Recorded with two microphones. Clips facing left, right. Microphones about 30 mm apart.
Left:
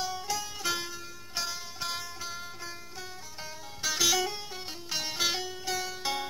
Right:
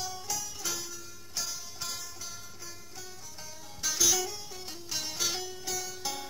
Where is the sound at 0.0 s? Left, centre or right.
Left.